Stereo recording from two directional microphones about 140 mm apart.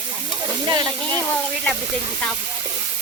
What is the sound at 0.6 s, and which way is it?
Speech, 30° right (ahead or behind).